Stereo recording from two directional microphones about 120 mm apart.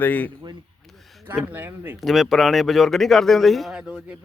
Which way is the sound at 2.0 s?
Centre (ahead or behind).